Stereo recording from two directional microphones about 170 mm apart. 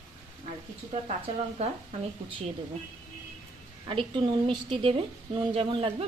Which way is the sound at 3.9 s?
30° right (ahead or behind).